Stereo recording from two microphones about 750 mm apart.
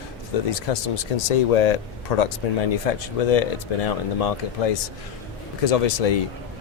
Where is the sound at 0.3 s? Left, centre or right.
Left.